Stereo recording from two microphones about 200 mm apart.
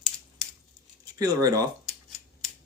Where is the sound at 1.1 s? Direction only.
20° right (ahead or behind).